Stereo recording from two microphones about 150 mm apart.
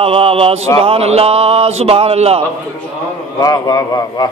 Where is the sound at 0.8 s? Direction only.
40° right (ahead or behind).